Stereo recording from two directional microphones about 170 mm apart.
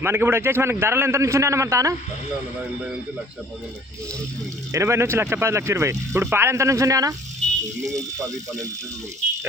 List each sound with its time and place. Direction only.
0.0 s a man's voice: 10° right (ahead or behind)
4.7 s a man's voice: 15° right (ahead or behind)